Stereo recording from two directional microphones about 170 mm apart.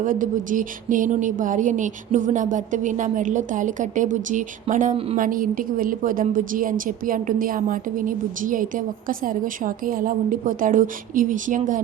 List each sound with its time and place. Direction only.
0.0 s a woman's voice: 50° right (ahead or behind)